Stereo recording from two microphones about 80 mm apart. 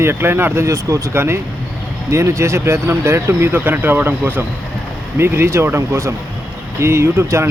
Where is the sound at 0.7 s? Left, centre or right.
Right.